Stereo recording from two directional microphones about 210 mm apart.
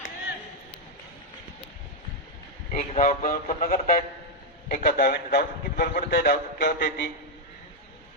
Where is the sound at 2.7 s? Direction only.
40° left (ahead or behind).